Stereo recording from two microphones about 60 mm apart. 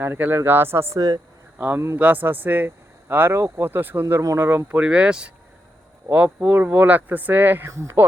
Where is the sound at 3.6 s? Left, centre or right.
Right.